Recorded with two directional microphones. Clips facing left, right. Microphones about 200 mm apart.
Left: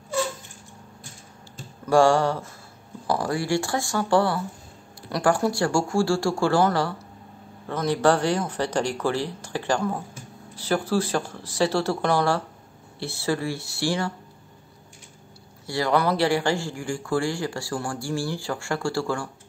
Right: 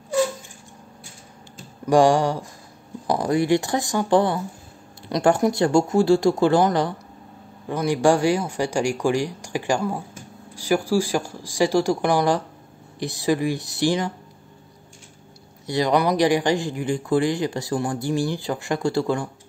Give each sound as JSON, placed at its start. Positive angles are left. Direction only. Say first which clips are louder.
{"t": 1.9, "sound": "speech", "louder": "right 2 dB", "side_deg": -15}
{"t": 15.6, "sound": "speech", "louder": "right 3 dB", "side_deg": -20}